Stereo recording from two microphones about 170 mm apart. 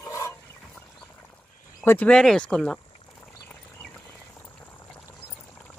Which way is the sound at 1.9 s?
10° left (ahead or behind).